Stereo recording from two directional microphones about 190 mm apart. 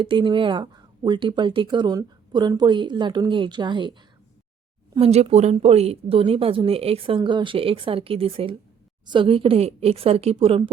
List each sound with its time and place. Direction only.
0.0 s speech: 25° right (ahead or behind)
4.9 s a woman's voice: 30° right (ahead or behind)